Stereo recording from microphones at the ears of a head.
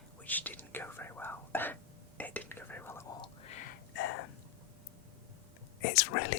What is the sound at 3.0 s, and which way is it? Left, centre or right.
Whispering, left.